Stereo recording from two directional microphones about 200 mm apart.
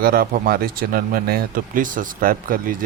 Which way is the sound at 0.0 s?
45° right (ahead or behind).